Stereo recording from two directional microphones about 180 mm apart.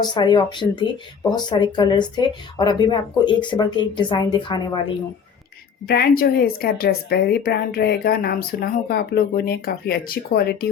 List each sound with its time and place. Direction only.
0.0 s speech: 25° left (ahead or behind)
5.8 s a woman's voice: 60° left (ahead or behind)